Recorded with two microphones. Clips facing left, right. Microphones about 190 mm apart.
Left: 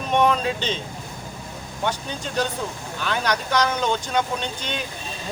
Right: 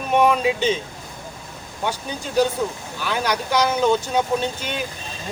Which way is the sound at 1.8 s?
10° right (ahead or behind).